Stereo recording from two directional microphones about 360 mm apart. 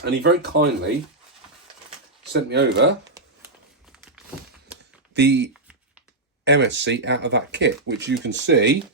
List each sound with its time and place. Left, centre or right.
0.0 s speech: right
2.3 s speech: right
5.1 s speech: right